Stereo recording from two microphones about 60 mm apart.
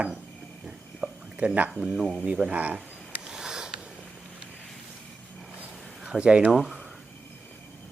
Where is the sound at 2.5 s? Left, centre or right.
Right.